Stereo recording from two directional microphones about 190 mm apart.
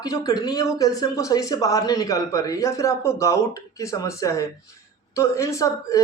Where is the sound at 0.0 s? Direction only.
20° left (ahead or behind).